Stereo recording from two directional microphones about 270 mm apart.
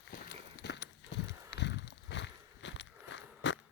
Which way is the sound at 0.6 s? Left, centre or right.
Left.